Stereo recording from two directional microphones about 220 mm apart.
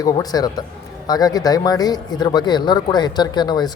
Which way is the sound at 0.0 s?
15° left (ahead or behind).